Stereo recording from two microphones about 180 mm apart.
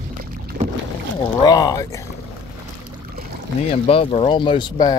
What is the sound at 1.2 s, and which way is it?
Speech, 20° left (ahead or behind).